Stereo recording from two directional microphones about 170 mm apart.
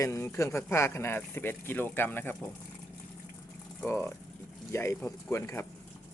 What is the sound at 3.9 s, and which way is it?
Speech, 15° left (ahead or behind).